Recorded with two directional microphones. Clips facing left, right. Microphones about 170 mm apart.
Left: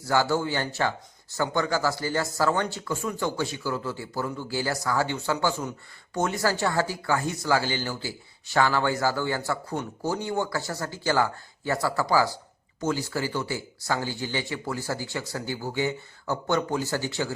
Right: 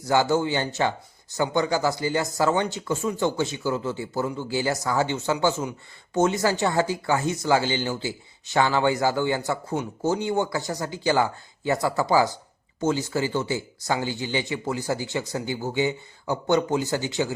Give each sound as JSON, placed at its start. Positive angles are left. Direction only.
{"t": 0.0, "sound": "speech", "side_deg": -20}